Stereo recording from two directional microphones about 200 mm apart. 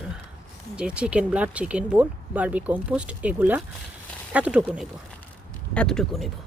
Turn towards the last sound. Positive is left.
turn(degrees=0)  # may be behind; listen again after turning